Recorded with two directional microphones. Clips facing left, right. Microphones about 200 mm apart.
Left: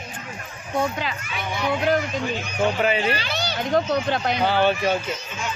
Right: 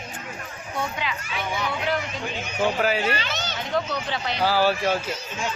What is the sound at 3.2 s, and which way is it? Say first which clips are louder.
A child's voice: left 3 dB; 35° left (ahead or behind).